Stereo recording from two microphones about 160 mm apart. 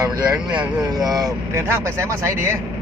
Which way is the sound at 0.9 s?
25° right (ahead or behind).